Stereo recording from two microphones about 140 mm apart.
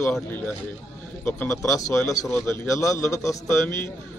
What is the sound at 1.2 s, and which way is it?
A man's voice, 20° left (ahead or behind).